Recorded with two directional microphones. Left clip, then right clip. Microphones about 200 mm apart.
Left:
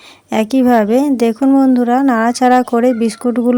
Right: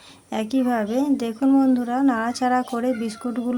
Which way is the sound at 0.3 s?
35° left (ahead or behind).